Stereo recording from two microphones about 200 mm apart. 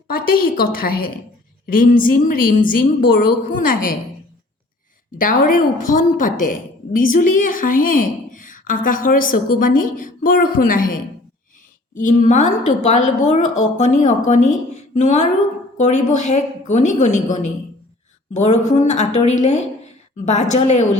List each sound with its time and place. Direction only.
0.1 s a woman's voice: 45° left (ahead or behind)
5.1 s a woman's voice: 45° left (ahead or behind)
18.4 s a woman's voice: 35° left (ahead or behind)